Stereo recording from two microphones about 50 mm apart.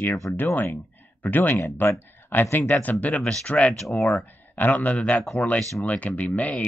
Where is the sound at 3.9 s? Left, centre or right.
Left.